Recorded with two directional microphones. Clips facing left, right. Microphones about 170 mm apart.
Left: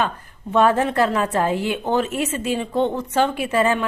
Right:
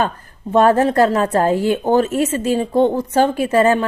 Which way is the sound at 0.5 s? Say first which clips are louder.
Right 4 dB; 40° right (ahead or behind).